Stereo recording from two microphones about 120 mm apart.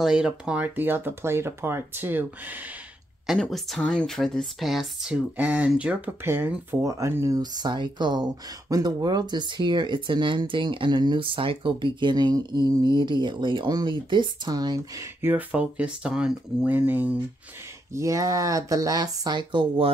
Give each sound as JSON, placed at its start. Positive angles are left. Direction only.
{"t": 0.0, "sound": "speech", "side_deg": -5}
{"t": 3.3, "sound": "speech", "side_deg": 0}
{"t": 15.2, "sound": "speech", "side_deg": -10}
{"t": 17.9, "sound": "speech", "side_deg": -25}